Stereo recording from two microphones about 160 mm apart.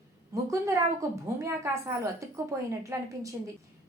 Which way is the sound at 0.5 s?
20° right (ahead or behind).